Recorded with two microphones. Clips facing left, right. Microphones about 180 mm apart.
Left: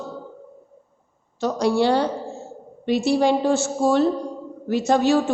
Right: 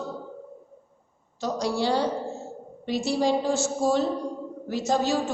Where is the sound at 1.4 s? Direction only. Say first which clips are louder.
Left 6 dB; 60° left (ahead or behind).